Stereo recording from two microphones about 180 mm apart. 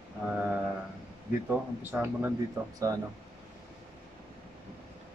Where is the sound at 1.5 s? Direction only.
10° right (ahead or behind).